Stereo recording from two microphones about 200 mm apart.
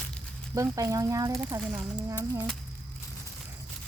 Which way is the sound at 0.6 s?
15° right (ahead or behind).